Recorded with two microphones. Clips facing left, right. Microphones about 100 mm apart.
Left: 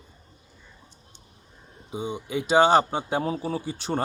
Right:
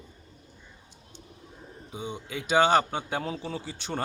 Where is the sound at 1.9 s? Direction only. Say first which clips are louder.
Left 6 dB; 15° left (ahead or behind).